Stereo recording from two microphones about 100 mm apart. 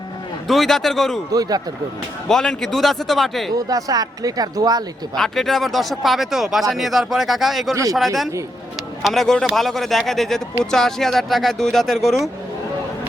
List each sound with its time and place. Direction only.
0.4 s speech: centre (ahead or behind)
1.3 s speech: 40° right (ahead or behind)
2.3 s speech: 5° left (ahead or behind)
3.5 s speech: 35° right (ahead or behind)
5.1 s speech: 5° left (ahead or behind)